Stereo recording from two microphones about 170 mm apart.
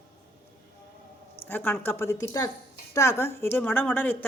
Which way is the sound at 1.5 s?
10° left (ahead or behind).